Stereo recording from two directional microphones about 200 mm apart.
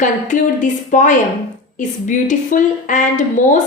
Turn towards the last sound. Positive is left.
turn(degrees=40)  # may be behind; listen again after turning